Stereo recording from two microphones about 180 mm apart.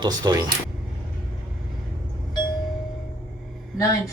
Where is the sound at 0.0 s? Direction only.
25° right (ahead or behind).